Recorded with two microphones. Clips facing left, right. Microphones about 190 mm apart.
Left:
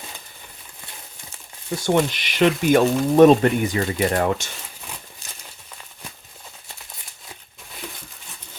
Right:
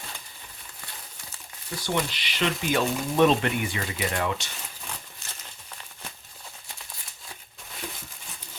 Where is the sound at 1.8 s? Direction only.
50° left (ahead or behind).